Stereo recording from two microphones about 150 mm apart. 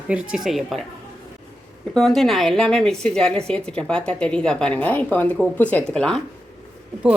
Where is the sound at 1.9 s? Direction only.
Centre (ahead or behind).